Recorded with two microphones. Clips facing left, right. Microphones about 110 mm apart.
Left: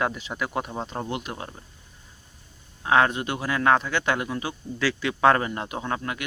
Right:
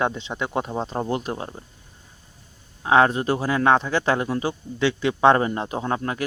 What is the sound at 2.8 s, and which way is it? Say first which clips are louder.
Speech: right 4 dB; 30° right (ahead or behind).